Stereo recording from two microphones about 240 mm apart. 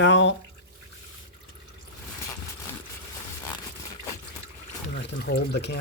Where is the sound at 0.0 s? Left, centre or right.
Left.